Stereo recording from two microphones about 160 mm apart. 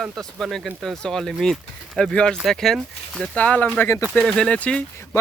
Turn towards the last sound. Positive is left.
turn(degrees=15)  # may be behind; listen again after turning